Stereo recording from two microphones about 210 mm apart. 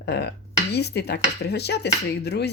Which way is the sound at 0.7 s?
50° left (ahead or behind).